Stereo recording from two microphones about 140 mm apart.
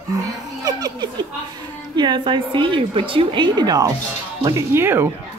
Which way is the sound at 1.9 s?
30° right (ahead or behind).